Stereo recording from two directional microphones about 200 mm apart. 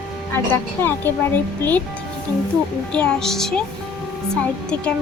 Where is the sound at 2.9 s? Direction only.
5° left (ahead or behind).